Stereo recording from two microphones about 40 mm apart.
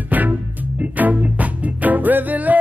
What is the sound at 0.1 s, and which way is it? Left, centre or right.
Music, right.